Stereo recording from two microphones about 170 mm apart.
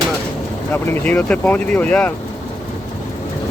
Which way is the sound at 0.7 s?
10° left (ahead or behind).